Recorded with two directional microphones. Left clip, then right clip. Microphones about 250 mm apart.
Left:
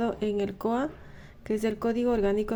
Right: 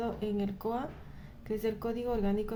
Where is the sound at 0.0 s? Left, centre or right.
Left.